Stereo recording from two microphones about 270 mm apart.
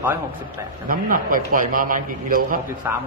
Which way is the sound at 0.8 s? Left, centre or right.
Right.